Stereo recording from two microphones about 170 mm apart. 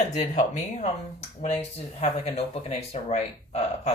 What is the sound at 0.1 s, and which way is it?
Speech, 45° left (ahead or behind).